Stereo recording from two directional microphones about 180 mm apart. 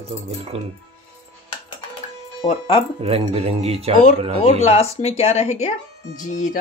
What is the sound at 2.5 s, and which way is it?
Speech, 30° left (ahead or behind).